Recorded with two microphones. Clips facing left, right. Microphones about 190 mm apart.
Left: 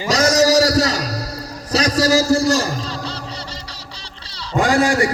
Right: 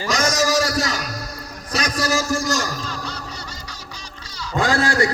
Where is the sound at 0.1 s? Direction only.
40° left (ahead or behind).